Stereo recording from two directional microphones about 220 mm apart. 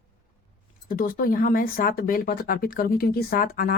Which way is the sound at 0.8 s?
40° left (ahead or behind).